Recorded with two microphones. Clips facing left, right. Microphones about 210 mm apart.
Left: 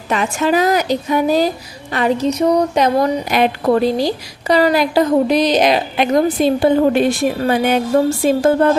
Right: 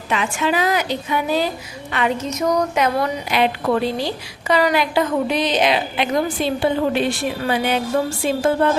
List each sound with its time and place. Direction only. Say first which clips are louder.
0.1 s a woman's voice: left 5 dB; 45° left (ahead or behind)
8.2 s music: left 5 dB; 45° left (ahead or behind)